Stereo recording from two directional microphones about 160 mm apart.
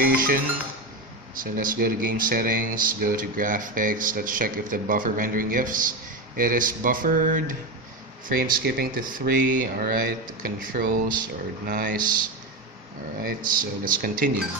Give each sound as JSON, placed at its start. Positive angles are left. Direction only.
{"t": 0.0, "sound": "music", "side_deg": -65}
{"t": 1.3, "sound": "speech", "side_deg": -60}